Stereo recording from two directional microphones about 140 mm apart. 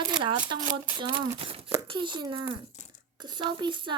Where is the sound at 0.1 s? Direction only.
35° right (ahead or behind).